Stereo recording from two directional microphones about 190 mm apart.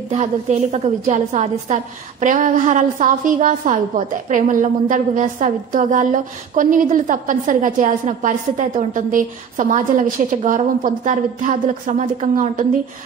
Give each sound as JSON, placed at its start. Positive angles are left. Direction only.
{"t": 0.1, "sound": "a woman's voice", "side_deg": -35}